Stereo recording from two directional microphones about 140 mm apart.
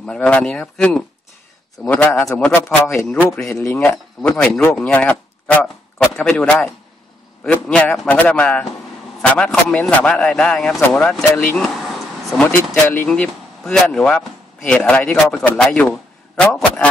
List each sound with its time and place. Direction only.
0.0 s a man's voice: 10° left (ahead or behind)
3.9 s a man's voice: 5° left (ahead or behind)
12.9 s a man's voice: 10° left (ahead or behind)